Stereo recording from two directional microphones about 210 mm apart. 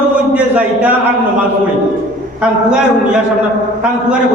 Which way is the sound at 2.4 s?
5° right (ahead or behind).